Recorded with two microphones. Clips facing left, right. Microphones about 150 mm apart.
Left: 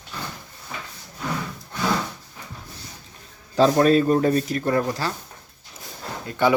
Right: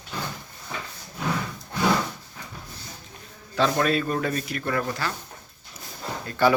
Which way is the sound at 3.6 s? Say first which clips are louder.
Left 6 dB; 35° left (ahead or behind).